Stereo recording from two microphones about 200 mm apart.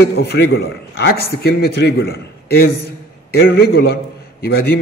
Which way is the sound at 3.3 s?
50° left (ahead or behind).